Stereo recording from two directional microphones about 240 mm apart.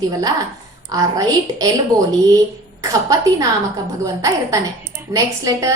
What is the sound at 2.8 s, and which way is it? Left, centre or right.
A woman's voice, centre.